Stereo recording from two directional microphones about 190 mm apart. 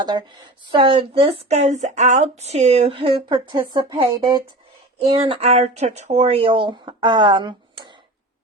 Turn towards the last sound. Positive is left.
turn(degrees=-25)  # may be behind; listen again after turning